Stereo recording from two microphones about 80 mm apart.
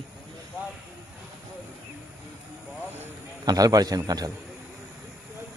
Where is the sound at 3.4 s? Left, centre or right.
Right.